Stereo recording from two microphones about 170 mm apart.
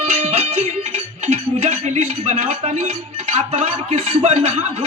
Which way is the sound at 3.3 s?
40° right (ahead or behind).